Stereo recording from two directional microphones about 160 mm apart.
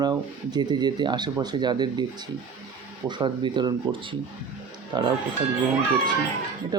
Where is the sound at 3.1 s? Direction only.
30° right (ahead or behind).